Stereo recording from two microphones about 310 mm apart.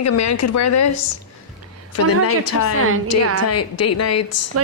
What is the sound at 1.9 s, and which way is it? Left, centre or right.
Speech, left.